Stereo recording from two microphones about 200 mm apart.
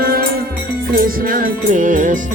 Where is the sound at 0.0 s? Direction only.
50° right (ahead or behind).